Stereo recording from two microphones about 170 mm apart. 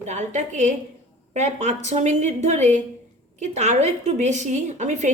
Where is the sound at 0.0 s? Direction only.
45° right (ahead or behind).